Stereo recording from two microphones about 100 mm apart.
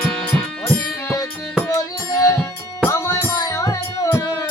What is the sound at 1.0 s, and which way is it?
Music, 35° left (ahead or behind).